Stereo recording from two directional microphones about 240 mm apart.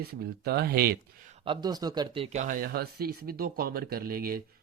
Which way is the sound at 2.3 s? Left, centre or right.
Right.